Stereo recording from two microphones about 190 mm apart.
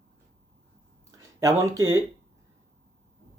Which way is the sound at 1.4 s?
15° right (ahead or behind).